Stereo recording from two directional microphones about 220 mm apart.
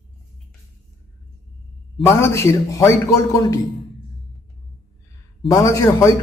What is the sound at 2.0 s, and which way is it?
Speech, 10° left (ahead or behind).